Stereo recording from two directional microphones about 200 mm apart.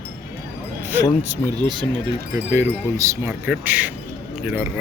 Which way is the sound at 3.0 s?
15° right (ahead or behind).